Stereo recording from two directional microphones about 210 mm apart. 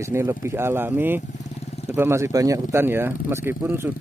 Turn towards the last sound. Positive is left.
turn(degrees=-10)  # may be behind; listen again after turning